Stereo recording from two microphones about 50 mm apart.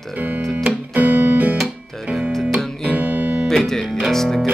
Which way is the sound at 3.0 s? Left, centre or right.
Right.